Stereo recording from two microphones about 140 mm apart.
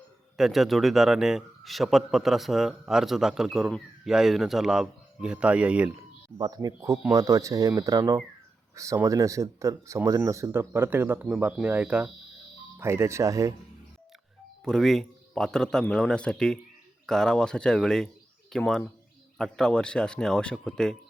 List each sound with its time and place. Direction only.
0.3 s a man's voice: centre (ahead or behind)
6.3 s speech: 30° right (ahead or behind)
14.6 s a man's voice: 5° left (ahead or behind)